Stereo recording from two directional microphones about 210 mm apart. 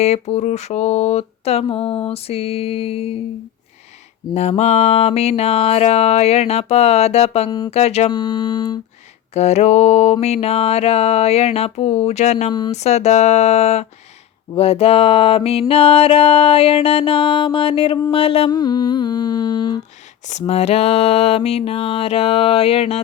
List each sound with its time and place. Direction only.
0.0 s music: 30° left (ahead or behind)
4.4 s music: 30° left (ahead or behind)
9.3 s a sound: 30° left (ahead or behind)
14.5 s music: 30° left (ahead or behind)
20.2 s music: 35° left (ahead or behind)